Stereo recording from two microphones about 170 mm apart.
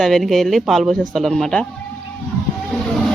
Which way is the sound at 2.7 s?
Centre (ahead or behind).